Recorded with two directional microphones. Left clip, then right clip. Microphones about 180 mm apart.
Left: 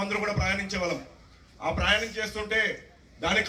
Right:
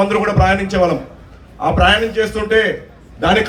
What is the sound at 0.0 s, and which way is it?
A man's voice, 30° right (ahead or behind).